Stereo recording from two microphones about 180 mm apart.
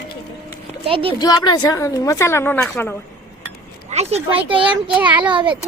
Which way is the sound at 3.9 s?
35° right (ahead or behind).